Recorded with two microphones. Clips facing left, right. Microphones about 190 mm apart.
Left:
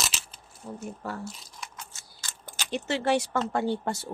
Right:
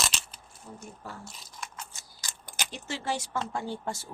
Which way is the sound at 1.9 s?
15° right (ahead or behind).